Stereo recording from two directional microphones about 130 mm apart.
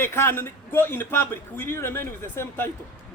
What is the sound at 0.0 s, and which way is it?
A man's voice, 20° left (ahead or behind).